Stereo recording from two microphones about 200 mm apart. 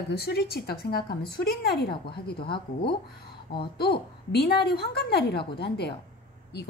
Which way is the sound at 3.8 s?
55° left (ahead or behind).